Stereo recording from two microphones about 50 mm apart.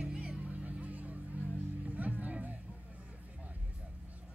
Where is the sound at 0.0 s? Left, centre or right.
Right.